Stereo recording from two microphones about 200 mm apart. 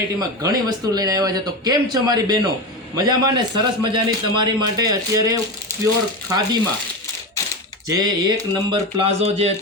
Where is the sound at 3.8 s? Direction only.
25° right (ahead or behind).